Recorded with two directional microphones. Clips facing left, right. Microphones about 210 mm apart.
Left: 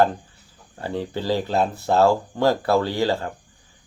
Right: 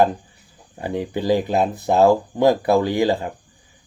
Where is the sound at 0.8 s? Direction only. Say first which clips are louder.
Right 3 dB; 15° right (ahead or behind).